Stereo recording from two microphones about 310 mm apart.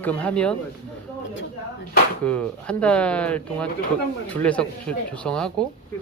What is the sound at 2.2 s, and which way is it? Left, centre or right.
Speech, centre.